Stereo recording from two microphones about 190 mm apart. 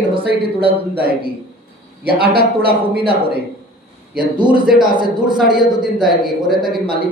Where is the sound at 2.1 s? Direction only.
55° right (ahead or behind).